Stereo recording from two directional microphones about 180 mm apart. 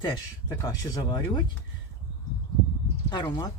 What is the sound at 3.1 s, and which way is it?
Speech, 25° left (ahead or behind).